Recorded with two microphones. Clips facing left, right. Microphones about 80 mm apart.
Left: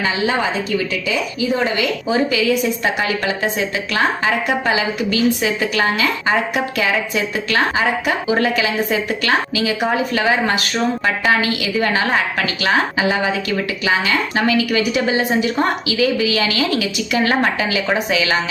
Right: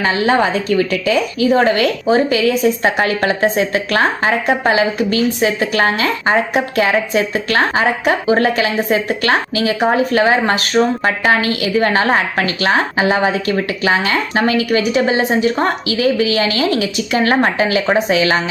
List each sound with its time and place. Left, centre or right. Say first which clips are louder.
0.0 s a woman's voice: right 5 dB; right